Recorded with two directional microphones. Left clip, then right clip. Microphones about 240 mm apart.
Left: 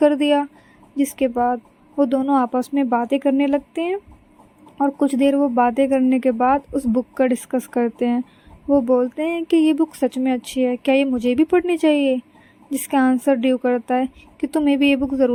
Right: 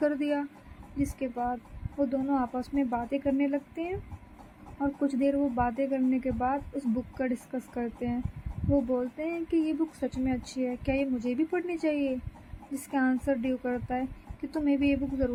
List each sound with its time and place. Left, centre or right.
0.0 s speech: left